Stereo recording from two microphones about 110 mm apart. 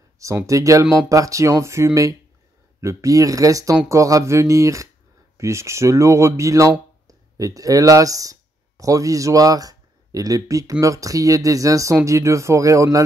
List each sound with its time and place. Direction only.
0.5 s speech: 30° right (ahead or behind)